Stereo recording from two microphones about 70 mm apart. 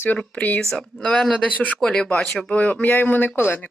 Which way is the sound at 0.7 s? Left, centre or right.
Centre.